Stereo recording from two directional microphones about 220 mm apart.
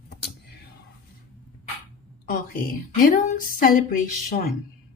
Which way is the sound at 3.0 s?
40° left (ahead or behind).